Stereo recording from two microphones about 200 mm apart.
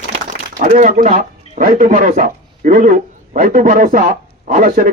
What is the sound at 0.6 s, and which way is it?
A man's voice, 40° right (ahead or behind).